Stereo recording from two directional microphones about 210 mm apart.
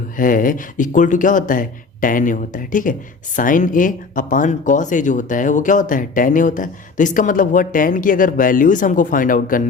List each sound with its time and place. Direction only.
0.2 s speech: 40° left (ahead or behind)